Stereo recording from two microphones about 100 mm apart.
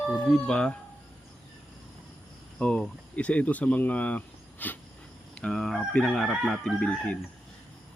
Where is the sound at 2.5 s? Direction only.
10° left (ahead or behind).